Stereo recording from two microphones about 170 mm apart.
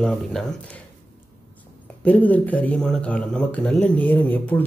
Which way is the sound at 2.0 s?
10° left (ahead or behind).